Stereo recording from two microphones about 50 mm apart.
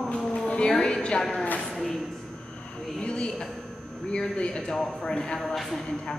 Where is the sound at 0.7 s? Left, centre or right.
Centre.